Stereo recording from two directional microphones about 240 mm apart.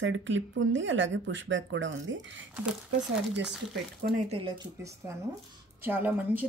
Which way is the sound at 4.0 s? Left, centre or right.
Right.